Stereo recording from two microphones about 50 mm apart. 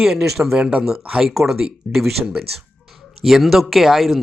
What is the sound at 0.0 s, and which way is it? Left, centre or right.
Speech, centre.